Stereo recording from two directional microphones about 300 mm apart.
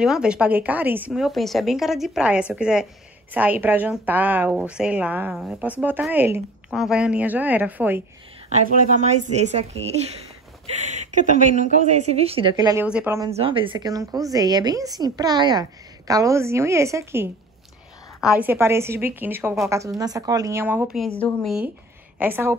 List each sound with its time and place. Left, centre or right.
0.0 s speech: centre
8.6 s speech: right
10.8 s a sound: right
11.1 s a woman's voice: right; by 13.3 s centre
13.3 s a woman's voice: centre